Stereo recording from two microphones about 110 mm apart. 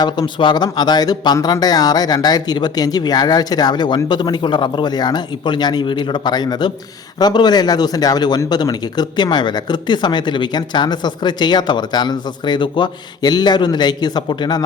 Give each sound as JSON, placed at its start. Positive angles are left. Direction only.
{"t": 0.0, "sound": "speech", "side_deg": 45}